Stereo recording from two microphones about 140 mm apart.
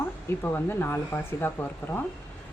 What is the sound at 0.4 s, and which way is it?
Speech, 15° left (ahead or behind).